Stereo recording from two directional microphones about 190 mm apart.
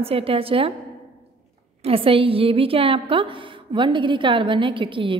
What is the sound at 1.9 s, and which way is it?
A woman's voice, 30° right (ahead or behind).